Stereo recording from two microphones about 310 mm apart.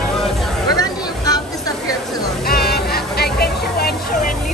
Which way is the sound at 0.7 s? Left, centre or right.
Centre.